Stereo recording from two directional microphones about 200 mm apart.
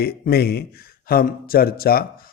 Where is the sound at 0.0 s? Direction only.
50° left (ahead or behind).